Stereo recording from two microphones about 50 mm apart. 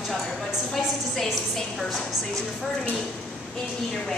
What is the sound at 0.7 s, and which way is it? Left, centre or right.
A woman's voice, centre.